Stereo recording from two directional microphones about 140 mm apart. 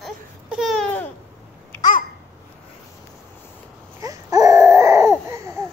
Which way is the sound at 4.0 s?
25° right (ahead or behind).